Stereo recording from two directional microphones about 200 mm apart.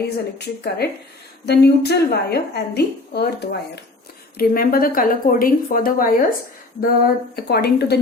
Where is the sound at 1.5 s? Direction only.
55° left (ahead or behind).